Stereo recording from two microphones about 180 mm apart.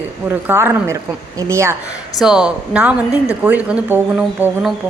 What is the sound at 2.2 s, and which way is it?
Speech, 5° right (ahead or behind).